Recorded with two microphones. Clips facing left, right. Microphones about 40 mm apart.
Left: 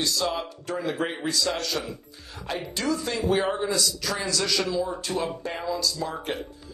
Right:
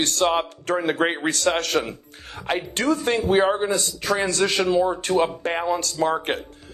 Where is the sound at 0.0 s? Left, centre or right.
Right.